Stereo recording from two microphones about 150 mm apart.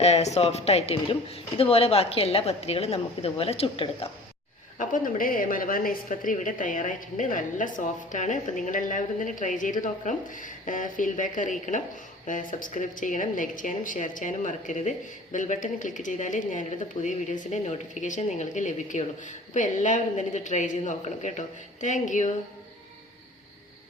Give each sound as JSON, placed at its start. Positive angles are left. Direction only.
{"t": 0.0, "sound": "speech", "side_deg": 45}
{"t": 4.8, "sound": "speech", "side_deg": 65}